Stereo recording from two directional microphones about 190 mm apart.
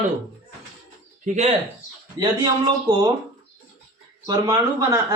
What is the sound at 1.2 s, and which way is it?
Speech, 35° right (ahead or behind).